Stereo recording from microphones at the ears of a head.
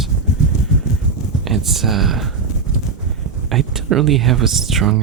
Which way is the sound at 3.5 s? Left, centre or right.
Right.